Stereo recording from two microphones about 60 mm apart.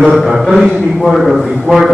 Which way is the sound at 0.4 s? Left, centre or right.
Centre.